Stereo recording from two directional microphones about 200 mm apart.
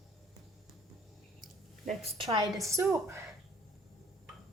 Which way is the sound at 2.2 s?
20° right (ahead or behind).